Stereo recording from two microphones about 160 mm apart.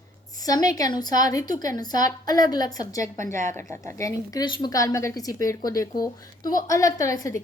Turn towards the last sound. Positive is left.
turn(degrees=20)  # may be behind; listen again after turning